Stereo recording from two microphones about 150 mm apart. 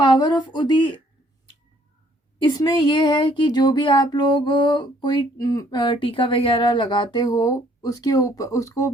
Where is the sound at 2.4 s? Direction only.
30° left (ahead or behind).